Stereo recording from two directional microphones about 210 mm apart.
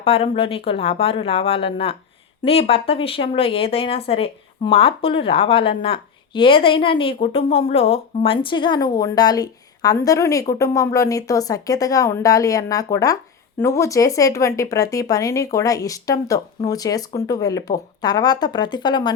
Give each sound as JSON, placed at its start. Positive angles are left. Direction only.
{"t": 0.0, "sound": "speech", "side_deg": 25}